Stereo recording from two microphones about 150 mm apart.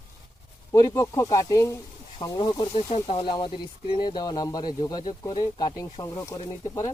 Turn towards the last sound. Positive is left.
turn(degrees=40)  # may be behind; listen again after turning